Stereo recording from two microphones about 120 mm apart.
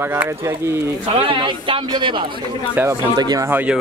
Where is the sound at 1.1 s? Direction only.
50° right (ahead or behind); by 3.5 s 35° right (ahead or behind).